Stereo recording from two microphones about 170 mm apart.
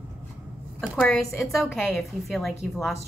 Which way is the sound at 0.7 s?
5° left (ahead or behind).